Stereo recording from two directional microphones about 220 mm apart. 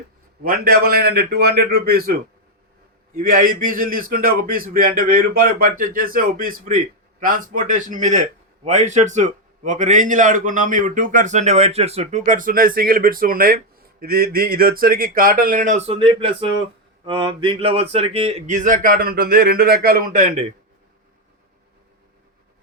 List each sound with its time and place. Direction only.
0.4 s a man's voice: 40° right (ahead or behind)
3.2 s a man's voice: 40° right (ahead or behind)
16.0 s a sound: 25° right (ahead or behind)
17.9 s a man's voice: 25° right (ahead or behind)